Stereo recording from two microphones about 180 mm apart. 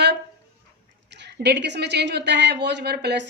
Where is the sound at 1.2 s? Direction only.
70° right (ahead or behind).